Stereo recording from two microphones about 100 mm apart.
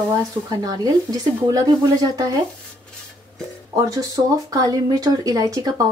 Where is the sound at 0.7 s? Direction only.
40° right (ahead or behind).